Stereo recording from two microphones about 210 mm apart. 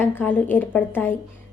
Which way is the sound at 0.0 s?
10° left (ahead or behind).